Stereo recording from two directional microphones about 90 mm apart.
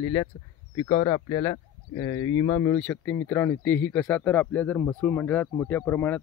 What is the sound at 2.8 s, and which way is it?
Speech, 15° left (ahead or behind).